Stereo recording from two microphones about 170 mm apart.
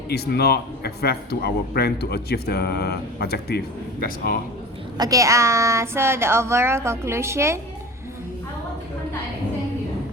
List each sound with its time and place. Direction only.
0.1 s a man's voice: 70° left (ahead or behind)
4.9 s a woman's voice: 20° right (ahead or behind)